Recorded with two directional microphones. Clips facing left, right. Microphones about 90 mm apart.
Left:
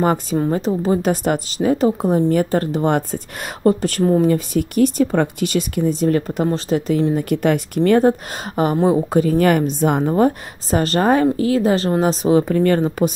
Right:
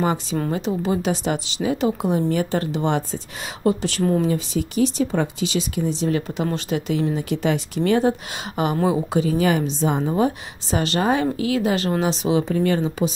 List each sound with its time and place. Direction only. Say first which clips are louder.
0.0 s speech: left 5 dB; 45° left (ahead or behind)
7.2 s speech: left 5 dB; 55° left (ahead or behind)
10.0 s speech: left 5 dB; 45° left (ahead or behind)